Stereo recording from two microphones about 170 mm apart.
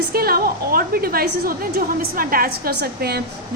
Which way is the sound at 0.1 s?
65° right (ahead or behind).